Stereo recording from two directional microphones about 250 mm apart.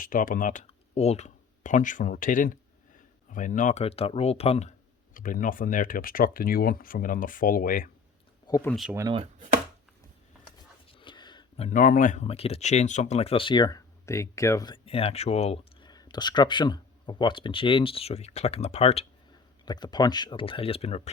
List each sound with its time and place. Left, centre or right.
0.0 s speech: left
8.4 s speech: centre
8.7 s speech: centre
9.0 s speech: centre
10.9 s speech: centre